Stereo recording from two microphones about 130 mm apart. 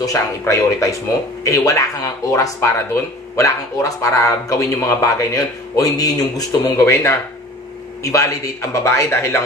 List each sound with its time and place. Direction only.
0.0 s speech: 25° left (ahead or behind)